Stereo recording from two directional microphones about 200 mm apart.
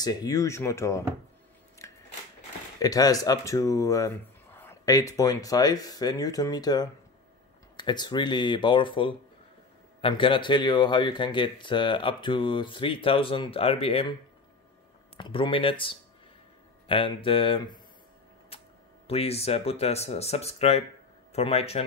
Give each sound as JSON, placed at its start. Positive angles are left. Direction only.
{"t": 0.0, "sound": "speech", "side_deg": 20}
{"t": 1.8, "sound": "scissors", "side_deg": 15}
{"t": 2.8, "sound": "speech", "side_deg": 20}
{"t": 15.1, "sound": "speech", "side_deg": 25}
{"t": 18.5, "sound": "a sound", "side_deg": 30}
{"t": 19.0, "sound": "speech", "side_deg": 30}